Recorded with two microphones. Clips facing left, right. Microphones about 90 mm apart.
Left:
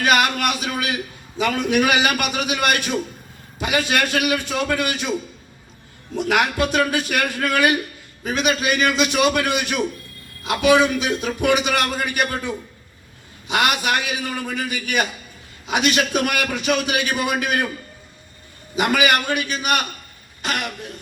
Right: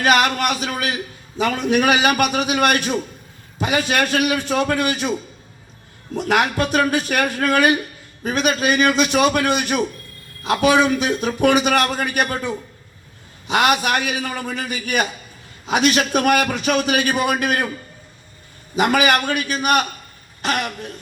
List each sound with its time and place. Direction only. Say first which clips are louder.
0.0 s a sound: right 2 dB; 40° right (ahead or behind)
1.4 s a man's voice: right 1 dB; 35° right (ahead or behind)
6.2 s a man's voice: right 1 dB; 40° right (ahead or behind)
18.8 s a man's voice: right 2 dB; 45° right (ahead or behind)